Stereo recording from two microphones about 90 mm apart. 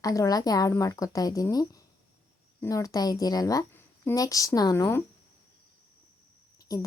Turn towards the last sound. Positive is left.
turn(degrees=40)  # may be behind; listen again after turning